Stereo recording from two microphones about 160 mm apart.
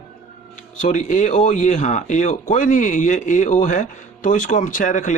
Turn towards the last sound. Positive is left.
turn(degrees=50)  # may be behind; listen again after turning